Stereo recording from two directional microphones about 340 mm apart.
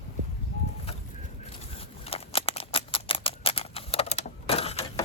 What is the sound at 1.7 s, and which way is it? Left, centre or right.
Scissors, centre.